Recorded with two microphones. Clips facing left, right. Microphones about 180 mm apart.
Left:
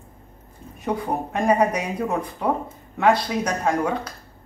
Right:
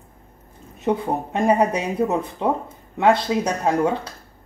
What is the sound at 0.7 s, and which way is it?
Speech, 25° right (ahead or behind).